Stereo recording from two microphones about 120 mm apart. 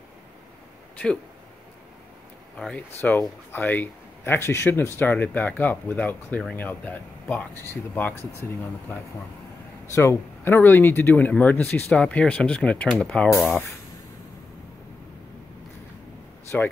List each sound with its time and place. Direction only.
2.5 s a man's voice: 10° left (ahead or behind)
9.8 s a man's voice: 20° left (ahead or behind)
16.5 s a man's voice: 15° left (ahead or behind)